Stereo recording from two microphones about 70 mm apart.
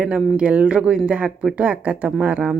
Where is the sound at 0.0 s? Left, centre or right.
Centre.